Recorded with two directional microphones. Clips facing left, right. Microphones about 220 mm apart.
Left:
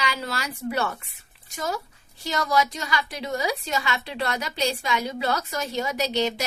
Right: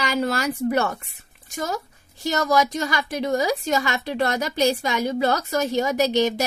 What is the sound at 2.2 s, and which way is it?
A woman's voice, 45° right (ahead or behind).